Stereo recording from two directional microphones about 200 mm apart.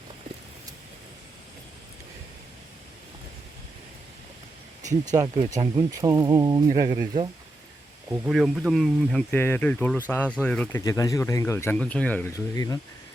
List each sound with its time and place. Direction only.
5.1 s speech: 20° right (ahead or behind)
8.3 s speech: centre (ahead or behind); by 12.8 s 20° left (ahead or behind)